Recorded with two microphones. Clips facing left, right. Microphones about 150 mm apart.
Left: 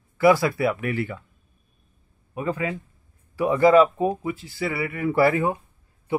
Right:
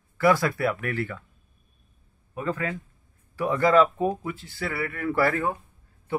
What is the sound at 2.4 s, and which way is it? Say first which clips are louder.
A man's voice: left 2 dB; 10° left (ahead or behind).